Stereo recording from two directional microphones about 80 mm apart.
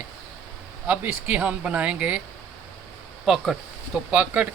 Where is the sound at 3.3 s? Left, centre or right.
Centre.